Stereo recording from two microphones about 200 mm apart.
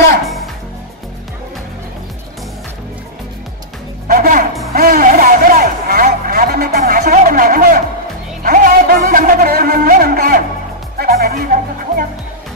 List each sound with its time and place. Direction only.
4.1 s music: 45° right (ahead or behind)
4.7 s a sound: 45° right (ahead or behind)
8.4 s music: 45° right (ahead or behind)